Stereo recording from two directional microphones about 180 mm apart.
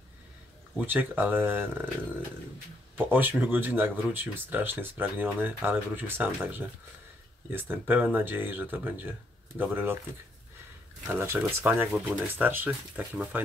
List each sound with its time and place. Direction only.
0.7 s speech: 10° right (ahead or behind)
3.1 s speech: 10° right (ahead or behind)
11.1 s speech: 10° right (ahead or behind)